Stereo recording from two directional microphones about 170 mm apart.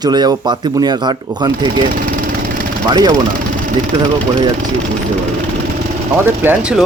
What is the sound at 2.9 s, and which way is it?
Speech, 25° right (ahead or behind).